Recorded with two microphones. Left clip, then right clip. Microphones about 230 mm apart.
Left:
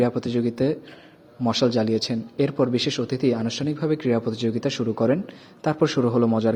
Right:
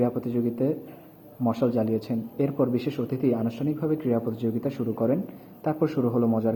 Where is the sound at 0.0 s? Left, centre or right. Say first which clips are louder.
Left 4 dB; left.